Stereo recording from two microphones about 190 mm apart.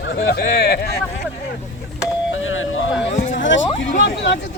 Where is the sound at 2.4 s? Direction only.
90° left.